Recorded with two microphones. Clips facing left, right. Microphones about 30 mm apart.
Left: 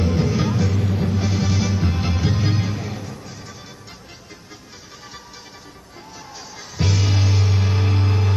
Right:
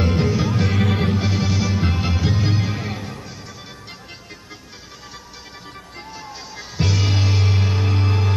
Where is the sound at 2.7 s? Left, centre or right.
Right.